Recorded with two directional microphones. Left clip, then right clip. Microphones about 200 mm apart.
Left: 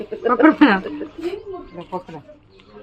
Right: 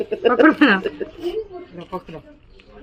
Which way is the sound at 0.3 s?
5° left (ahead or behind).